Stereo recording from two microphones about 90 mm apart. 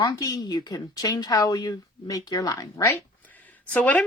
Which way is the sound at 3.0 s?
20° left (ahead or behind).